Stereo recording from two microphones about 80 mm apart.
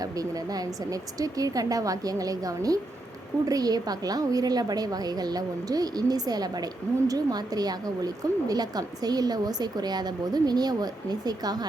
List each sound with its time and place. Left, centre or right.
0.0 s a woman's voice: right